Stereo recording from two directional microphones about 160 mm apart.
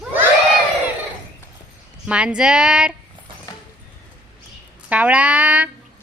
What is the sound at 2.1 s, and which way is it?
Female singing, 5° right (ahead or behind).